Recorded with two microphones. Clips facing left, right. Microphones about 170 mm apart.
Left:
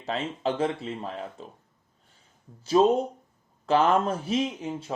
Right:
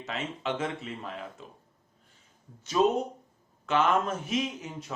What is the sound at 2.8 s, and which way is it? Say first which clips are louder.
Speech: left 4 dB; 35° left (ahead or behind).